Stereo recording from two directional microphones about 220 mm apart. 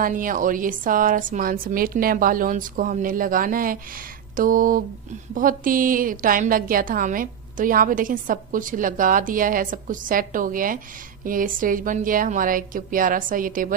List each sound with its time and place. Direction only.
0.0 s a woman's voice: 40° right (ahead or behind)